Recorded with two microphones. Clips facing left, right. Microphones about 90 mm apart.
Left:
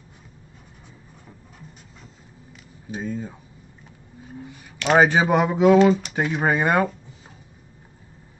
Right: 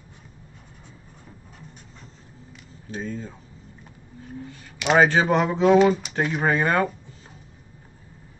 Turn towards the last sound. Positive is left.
turn(degrees=10)  # may be behind; listen again after turning